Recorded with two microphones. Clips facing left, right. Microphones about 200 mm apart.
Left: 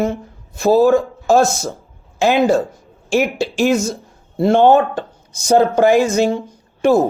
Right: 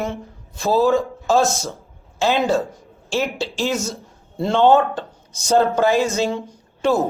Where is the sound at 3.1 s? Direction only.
15° left (ahead or behind).